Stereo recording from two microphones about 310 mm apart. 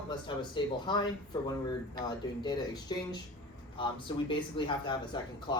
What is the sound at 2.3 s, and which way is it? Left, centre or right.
Speech, centre.